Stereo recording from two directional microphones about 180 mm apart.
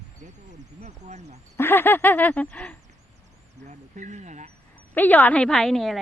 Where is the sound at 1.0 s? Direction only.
40° right (ahead or behind).